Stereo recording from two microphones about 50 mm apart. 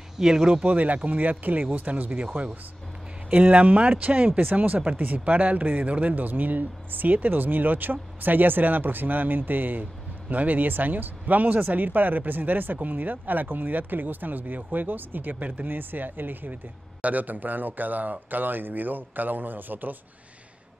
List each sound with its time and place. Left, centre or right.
0.2 s speech: centre
0.7 s speech: right
3.3 s speech: right